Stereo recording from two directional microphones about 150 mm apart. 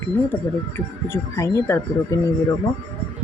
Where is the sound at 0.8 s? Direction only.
20° left (ahead or behind).